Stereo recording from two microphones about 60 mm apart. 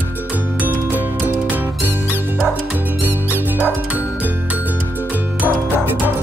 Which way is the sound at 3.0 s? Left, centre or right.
Right.